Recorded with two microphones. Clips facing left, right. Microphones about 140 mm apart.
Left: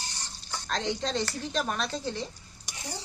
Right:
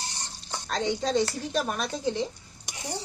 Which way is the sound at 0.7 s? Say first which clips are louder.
Right 4 dB; 5° right (ahead or behind).